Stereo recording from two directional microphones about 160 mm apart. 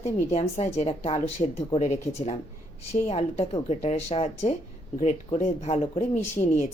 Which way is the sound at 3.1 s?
40° left (ahead or behind).